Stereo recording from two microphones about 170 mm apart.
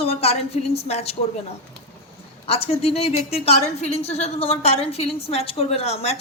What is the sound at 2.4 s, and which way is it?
A woman's voice, 35° left (ahead or behind).